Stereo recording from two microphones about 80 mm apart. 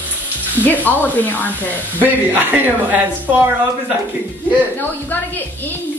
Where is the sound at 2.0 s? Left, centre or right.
Right.